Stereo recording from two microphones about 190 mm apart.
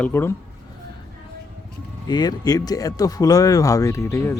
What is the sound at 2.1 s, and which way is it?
Speech, 20° left (ahead or behind).